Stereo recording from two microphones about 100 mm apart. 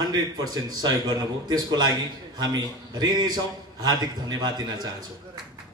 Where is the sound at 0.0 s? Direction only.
40° right (ahead or behind).